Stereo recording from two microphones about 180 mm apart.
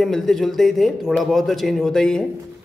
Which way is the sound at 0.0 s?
Centre (ahead or behind).